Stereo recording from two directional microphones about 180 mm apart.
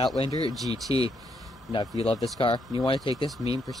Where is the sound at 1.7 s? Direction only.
30° left (ahead or behind).